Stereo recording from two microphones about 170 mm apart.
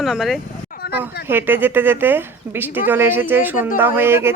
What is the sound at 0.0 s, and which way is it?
Speech, centre (ahead or behind).